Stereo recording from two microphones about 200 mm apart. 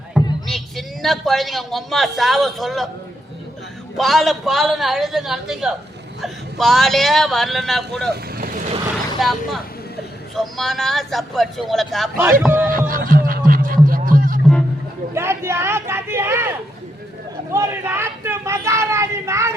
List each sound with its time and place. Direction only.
0.4 s a man's voice: centre (ahead or behind)
3.9 s a man's voice: centre (ahead or behind)
8.1 s vehicle: 45° right (ahead or behind)
9.2 s a man's voice: centre (ahead or behind)
10.4 s a man's voice: centre (ahead or behind)
12.2 s speech: 10° right (ahead or behind)
12.7 s music: 45° right (ahead or behind)
15.1 s a sound: 10° right (ahead or behind)
17.5 s speech: 10° right (ahead or behind)